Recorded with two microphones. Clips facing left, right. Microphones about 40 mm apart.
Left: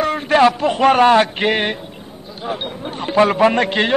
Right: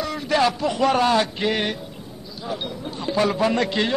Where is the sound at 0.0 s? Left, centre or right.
Left.